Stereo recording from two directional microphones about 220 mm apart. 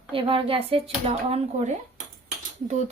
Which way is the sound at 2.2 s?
30° right (ahead or behind).